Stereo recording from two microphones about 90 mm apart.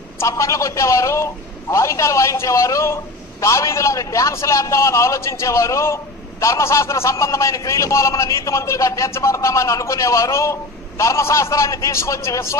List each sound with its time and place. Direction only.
0.2 s a man's voice: 35° left (ahead or behind)